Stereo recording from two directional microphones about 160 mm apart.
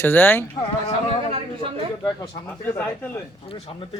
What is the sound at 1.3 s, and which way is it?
Speech, 35° right (ahead or behind).